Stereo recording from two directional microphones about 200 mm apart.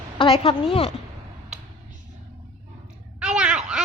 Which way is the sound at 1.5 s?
5° right (ahead or behind).